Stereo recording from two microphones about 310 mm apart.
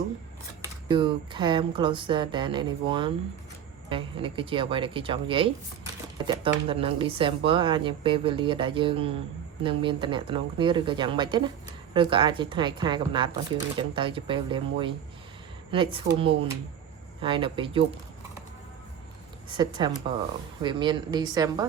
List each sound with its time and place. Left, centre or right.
0.6 s speech: centre
19.5 s speech: centre